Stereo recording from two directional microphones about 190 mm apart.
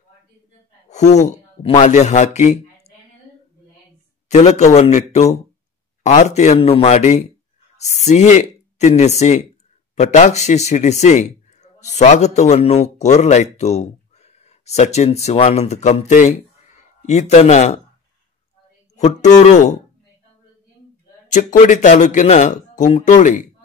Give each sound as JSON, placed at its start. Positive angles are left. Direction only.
{"t": 0.8, "sound": "a man's voice", "side_deg": 35}
{"t": 4.3, "sound": "a man's voice", "side_deg": 35}
{"t": 18.9, "sound": "speech", "side_deg": 40}
{"t": 21.3, "sound": "speech", "side_deg": 40}